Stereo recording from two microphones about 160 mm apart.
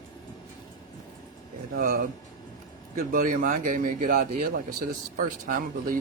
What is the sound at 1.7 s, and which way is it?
Speech, 60° right (ahead or behind).